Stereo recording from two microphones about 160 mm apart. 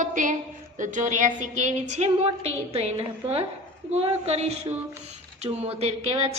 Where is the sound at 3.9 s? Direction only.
40° right (ahead or behind).